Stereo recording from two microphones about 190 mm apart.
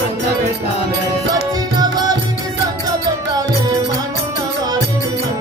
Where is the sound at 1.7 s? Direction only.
20° right (ahead or behind).